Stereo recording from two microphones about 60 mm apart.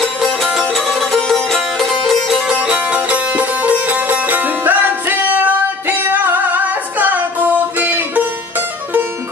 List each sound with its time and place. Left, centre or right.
0.0 s music: centre
2.4 s music: centre